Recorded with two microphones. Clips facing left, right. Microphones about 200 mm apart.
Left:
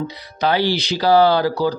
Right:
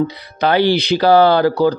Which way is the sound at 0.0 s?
60° right (ahead or behind).